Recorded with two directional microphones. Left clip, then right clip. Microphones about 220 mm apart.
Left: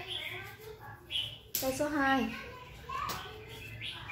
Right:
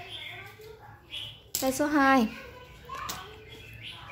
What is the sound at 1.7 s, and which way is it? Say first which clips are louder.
Speech: right 7 dB; 45° right (ahead or behind).